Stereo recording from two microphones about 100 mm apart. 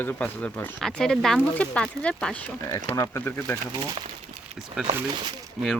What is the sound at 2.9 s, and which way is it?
Speech, 30° left (ahead or behind).